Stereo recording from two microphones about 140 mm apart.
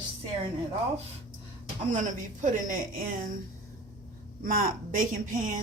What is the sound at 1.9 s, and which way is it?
A woman's voice, 60° right (ahead or behind).